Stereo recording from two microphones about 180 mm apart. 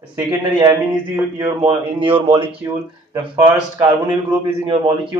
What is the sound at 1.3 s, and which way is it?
A man's voice, 25° right (ahead or behind).